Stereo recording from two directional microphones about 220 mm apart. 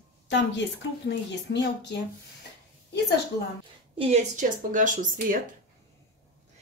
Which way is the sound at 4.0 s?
30° right (ahead or behind).